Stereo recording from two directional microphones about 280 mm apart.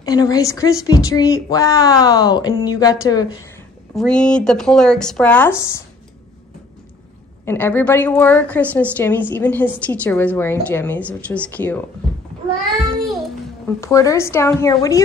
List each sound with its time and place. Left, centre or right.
0.0 s a woman's voice: centre
3.9 s speech: centre
7.4 s a woman's voice: centre
13.7 s a woman's voice: centre